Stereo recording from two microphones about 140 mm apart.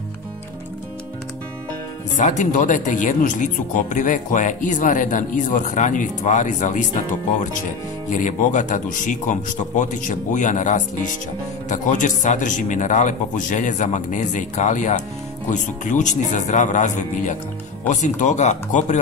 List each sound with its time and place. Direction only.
2.1 s speech: 60° left (ahead or behind)
8.1 s speech: 60° left (ahead or behind)